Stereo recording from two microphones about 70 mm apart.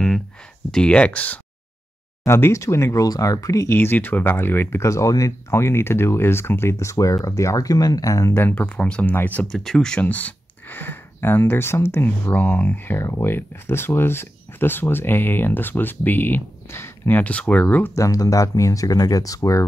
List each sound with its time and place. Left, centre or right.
0.7 s speech: centre
2.2 s speech: left
3.7 s speech: left
4.8 s speech: left
8.4 s speech: left
9.5 s speech: centre
10.0 s speech: left
17.9 s speech: left